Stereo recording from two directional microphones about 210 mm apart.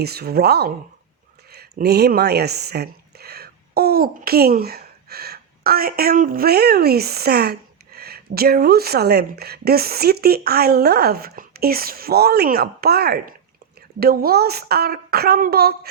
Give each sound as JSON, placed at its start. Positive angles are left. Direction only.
{"t": 0.0, "sound": "a woman's voice", "side_deg": -50}